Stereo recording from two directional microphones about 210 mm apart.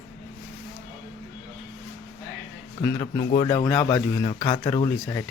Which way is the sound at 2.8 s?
10° left (ahead or behind).